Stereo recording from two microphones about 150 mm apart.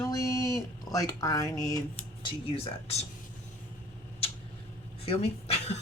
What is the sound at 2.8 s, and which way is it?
Speech, 45° left (ahead or behind).